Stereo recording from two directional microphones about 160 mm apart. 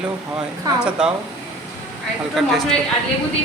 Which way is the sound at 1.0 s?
5° right (ahead or behind).